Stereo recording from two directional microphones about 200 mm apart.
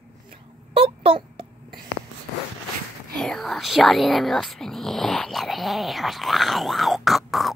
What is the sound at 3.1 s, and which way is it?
Speech, centre (ahead or behind).